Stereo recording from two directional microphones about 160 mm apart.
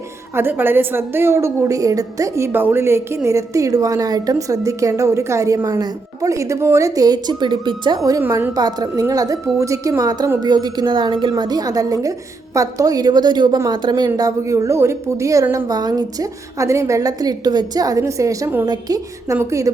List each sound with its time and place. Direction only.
0.3 s a woman's voice: 15° right (ahead or behind)